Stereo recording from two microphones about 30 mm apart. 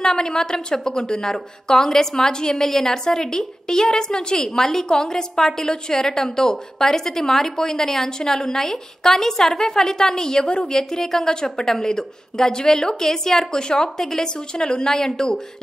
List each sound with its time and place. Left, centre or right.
0.0 s a woman's voice: left
13.5 s a woman's voice: left